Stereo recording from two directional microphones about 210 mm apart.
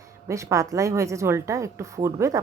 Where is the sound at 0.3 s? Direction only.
15° right (ahead or behind).